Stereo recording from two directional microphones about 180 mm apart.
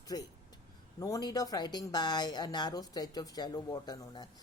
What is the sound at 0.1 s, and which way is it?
Speech, 20° left (ahead or behind).